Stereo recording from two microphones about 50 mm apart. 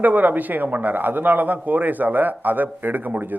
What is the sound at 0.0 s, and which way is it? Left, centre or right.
A man's voice, right.